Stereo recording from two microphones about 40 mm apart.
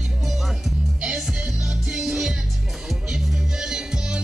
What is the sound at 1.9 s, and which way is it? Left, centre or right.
Music, centre.